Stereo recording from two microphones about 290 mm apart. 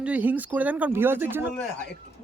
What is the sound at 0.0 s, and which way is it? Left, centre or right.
Speech, centre.